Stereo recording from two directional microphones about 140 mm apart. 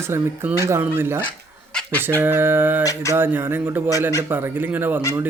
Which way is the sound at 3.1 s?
15° right (ahead or behind).